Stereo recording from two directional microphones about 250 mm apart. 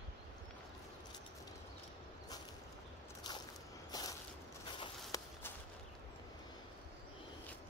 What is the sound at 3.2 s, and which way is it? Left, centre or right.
Biting, centre.